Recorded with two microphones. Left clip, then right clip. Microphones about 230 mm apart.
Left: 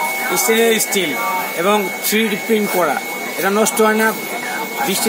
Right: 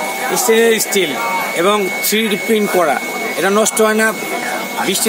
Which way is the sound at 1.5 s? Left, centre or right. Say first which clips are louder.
Right 3 dB; right.